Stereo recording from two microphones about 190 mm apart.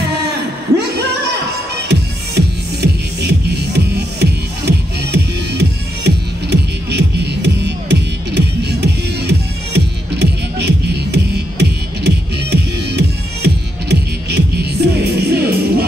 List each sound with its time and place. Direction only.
1.9 s music: 60° right (ahead or behind)